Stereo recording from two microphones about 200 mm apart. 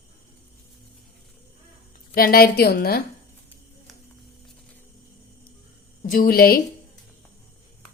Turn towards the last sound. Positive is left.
turn(degrees=50)  # may be behind; listen again after turning